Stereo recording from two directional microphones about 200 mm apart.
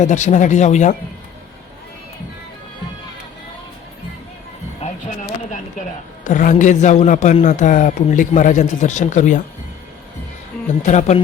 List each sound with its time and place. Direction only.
0.0 s a man's voice: 35° left (ahead or behind)
4.8 s music: 35° left (ahead or behind)
6.2 s a man's voice: 40° left (ahead or behind)
10.8 s a man's voice: 35° left (ahead or behind)